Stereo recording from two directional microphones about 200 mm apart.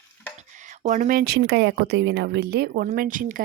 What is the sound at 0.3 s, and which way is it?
Speech, 40° right (ahead or behind).